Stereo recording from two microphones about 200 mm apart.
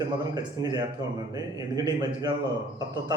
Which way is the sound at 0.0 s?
20° right (ahead or behind).